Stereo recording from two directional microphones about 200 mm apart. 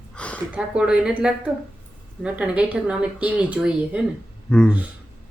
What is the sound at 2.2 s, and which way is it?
Speech, 5° right (ahead or behind).